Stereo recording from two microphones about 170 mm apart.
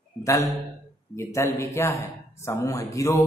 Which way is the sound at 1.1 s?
15° left (ahead or behind).